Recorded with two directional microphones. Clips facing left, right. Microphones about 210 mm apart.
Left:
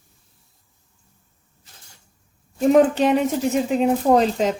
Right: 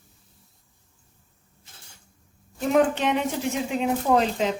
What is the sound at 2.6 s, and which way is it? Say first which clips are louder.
Speech: left 6 dB; 35° left (ahead or behind).